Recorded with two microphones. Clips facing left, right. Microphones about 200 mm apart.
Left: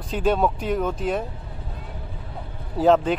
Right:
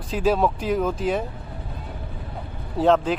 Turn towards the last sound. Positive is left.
turn(degrees=0)  # may be behind; listen again after turning